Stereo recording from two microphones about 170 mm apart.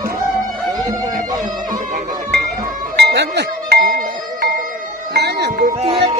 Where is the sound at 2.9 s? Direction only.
75° right (ahead or behind).